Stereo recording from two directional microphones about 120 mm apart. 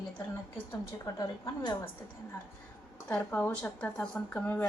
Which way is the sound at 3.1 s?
15° left (ahead or behind).